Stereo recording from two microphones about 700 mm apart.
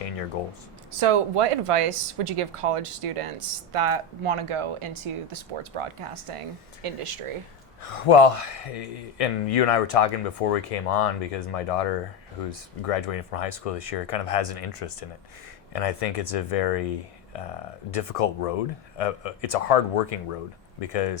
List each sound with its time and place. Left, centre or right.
0.4 s speech: left
0.9 s speech: right
7.8 s speech: left
17.9 s speech: left